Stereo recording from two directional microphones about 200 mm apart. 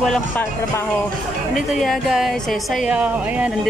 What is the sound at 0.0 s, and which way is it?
Speech, 5° left (ahead or behind).